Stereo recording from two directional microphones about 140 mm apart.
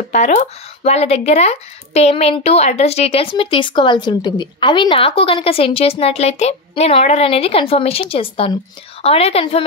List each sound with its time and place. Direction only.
0.1 s speech: 55° left (ahead or behind)